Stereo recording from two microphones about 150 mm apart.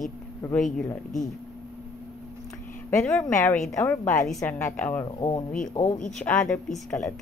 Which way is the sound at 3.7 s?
15° left (ahead or behind).